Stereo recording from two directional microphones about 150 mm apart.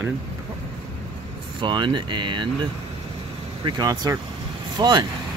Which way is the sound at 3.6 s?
25° right (ahead or behind).